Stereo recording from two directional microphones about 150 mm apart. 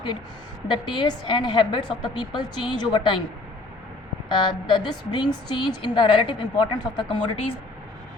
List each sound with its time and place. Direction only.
0.7 s a woman's voice: 30° left (ahead or behind)
4.3 s a woman's voice: 30° left (ahead or behind)